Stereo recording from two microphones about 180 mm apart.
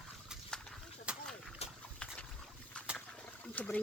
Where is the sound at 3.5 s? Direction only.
10° left (ahead or behind).